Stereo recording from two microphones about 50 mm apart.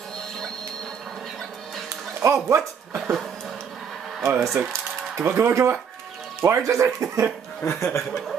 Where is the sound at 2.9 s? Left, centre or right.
Centre.